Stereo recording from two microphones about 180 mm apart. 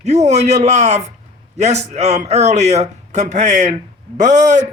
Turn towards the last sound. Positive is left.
turn(degrees=-45)  # may be behind; listen again after turning